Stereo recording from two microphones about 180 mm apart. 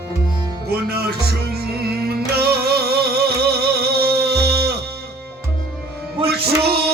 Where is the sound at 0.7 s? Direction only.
60° right (ahead or behind).